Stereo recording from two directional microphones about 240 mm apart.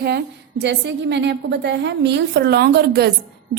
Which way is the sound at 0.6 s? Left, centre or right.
Right.